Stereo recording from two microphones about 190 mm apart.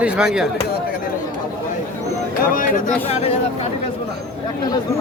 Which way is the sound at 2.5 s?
45° left (ahead or behind).